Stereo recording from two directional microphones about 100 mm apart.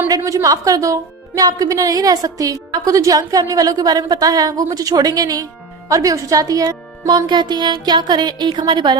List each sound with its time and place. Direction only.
0.2 s a woman's voice: 25° right (ahead or behind)
7.3 s speech: 45° right (ahead or behind)